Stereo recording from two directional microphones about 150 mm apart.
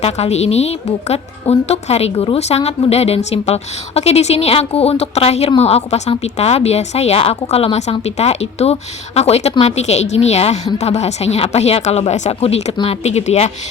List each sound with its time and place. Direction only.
0.0 s a woman's voice: 45° left (ahead or behind)